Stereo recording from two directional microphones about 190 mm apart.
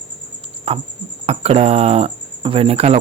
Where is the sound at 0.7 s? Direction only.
30° right (ahead or behind).